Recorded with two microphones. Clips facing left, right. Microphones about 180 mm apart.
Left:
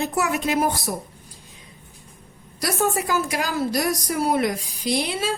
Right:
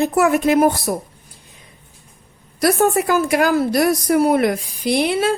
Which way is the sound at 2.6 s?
55° right (ahead or behind).